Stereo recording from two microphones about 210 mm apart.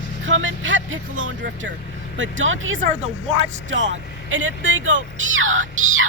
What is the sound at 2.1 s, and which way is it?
Speech, 65° right (ahead or behind).